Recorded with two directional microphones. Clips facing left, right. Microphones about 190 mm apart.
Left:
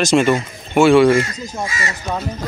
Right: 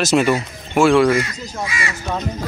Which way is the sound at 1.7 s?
40° left (ahead or behind).